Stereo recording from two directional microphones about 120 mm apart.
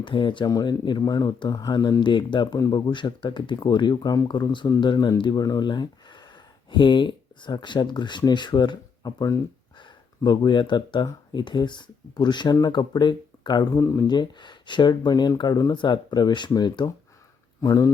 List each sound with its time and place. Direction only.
0.0 s speech: 40° left (ahead or behind); by 14.1 s 25° left (ahead or behind)
14.1 s speech: 40° left (ahead or behind)